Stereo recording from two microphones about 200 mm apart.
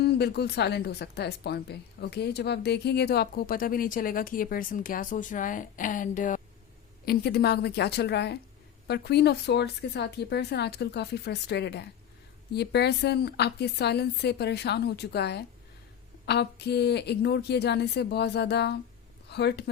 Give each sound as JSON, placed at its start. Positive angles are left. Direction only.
{"t": 0.0, "sound": "a woman's voice", "side_deg": 55}
{"t": 7.0, "sound": "a woman's voice", "side_deg": 50}